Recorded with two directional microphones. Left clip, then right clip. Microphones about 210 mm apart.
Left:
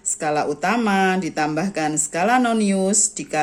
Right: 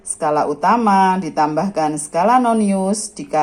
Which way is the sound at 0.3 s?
50° left (ahead or behind).